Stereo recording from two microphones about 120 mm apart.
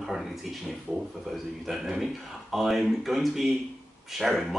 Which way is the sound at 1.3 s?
Centre (ahead or behind).